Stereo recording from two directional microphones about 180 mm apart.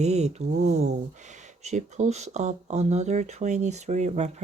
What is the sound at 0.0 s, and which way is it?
Speech, 40° right (ahead or behind).